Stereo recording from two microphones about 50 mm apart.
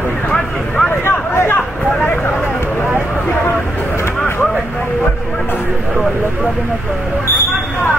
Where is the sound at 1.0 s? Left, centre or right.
Left.